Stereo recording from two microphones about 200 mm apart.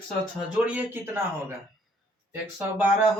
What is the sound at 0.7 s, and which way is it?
Speech, 10° right (ahead or behind).